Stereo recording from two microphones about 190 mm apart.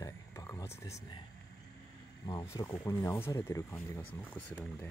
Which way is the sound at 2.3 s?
20° left (ahead or behind).